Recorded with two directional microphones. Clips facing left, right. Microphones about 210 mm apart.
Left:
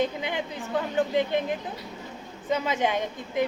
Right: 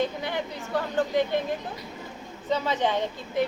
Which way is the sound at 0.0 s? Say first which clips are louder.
Left 1 dB; 15° left (ahead or behind).